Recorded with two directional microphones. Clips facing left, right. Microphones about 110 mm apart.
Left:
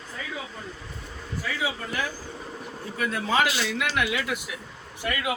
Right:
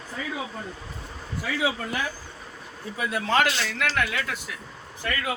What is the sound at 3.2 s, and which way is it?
A man's voice, 5° left (ahead or behind).